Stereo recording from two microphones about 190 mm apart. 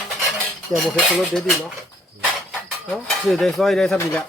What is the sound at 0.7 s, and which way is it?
Speech, centre (ahead or behind).